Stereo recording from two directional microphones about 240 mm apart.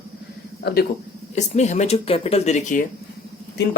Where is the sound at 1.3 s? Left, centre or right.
Left.